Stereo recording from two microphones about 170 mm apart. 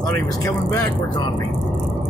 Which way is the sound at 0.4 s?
20° left (ahead or behind).